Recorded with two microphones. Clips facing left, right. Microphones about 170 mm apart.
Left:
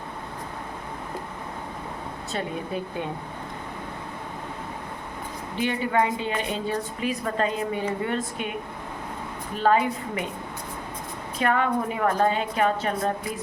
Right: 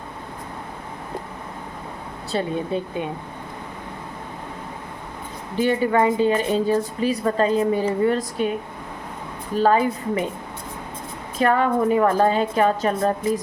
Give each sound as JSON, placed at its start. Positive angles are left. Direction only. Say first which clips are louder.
{"t": 2.3, "sound": "speech", "louder": "right 6 dB", "side_deg": -25}
{"t": 5.5, "sound": "a woman's voice", "louder": "right 5 dB", "side_deg": -40}
{"t": 9.6, "sound": "a woman's voice", "louder": "right 4 dB", "side_deg": -35}
{"t": 11.3, "sound": "a woman's voice", "louder": "right 5 dB", "side_deg": -40}